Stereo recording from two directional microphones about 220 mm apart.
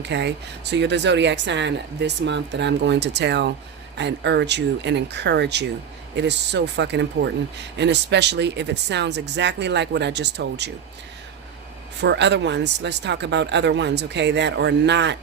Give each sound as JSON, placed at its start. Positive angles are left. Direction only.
{"t": 0.0, "sound": "speech", "side_deg": -50}
{"t": 11.9, "sound": "speech", "side_deg": -50}